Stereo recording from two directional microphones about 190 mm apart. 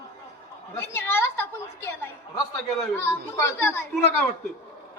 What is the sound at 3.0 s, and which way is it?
Speech, 10° left (ahead or behind).